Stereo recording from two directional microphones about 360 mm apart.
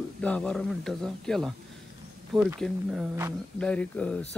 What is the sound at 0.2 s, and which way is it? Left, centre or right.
A man's voice, centre.